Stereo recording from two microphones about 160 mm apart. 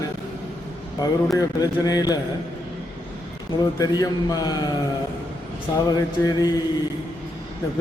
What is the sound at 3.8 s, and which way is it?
Speech, 25° left (ahead or behind).